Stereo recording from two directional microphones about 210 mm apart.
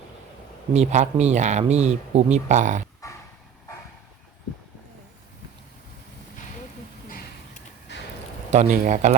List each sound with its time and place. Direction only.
0.7 s speech: 30° right (ahead or behind)
7.9 s a sound: 55° left (ahead or behind)
8.4 s speech: 35° right (ahead or behind)